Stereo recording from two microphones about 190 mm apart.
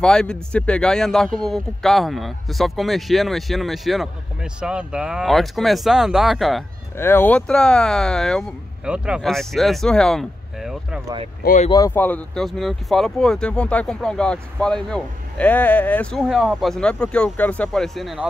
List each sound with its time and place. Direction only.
0.0 s a man's voice: 5° left (ahead or behind)
7.0 s a man's voice: 10° left (ahead or behind)
11.4 s speech: 40° left (ahead or behind)
11.7 s a man's voice: 15° left (ahead or behind)